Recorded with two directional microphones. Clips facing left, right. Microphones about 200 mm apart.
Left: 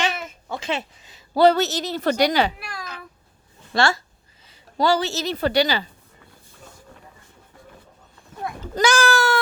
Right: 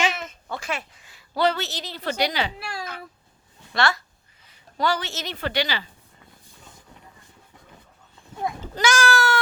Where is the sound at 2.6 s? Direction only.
30° right (ahead or behind).